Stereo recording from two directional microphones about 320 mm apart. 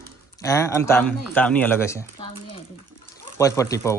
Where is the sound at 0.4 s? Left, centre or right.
Centre.